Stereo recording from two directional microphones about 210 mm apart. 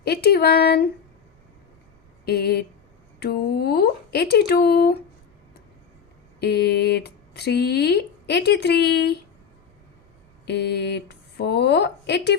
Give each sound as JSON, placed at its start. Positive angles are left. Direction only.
{"t": 0.0, "sound": "speech", "side_deg": 50}
{"t": 2.2, "sound": "speech", "side_deg": 50}
{"t": 6.4, "sound": "speech", "side_deg": 50}
{"t": 10.4, "sound": "speech", "side_deg": 55}